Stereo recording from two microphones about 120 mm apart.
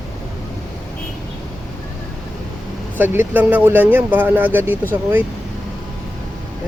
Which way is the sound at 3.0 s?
15° right (ahead or behind).